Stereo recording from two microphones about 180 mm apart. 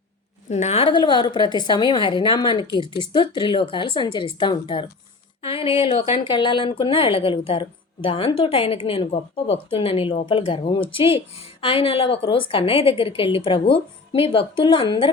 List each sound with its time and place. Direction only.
0.5 s a woman's voice: 35° left (ahead or behind)